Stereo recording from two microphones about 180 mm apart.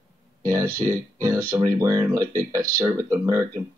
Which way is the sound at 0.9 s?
20° right (ahead or behind).